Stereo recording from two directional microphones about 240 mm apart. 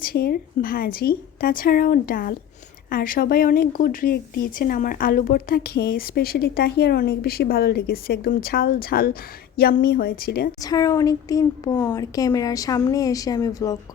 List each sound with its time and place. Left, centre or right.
0.0 s speech: left
10.6 s a woman's voice: centre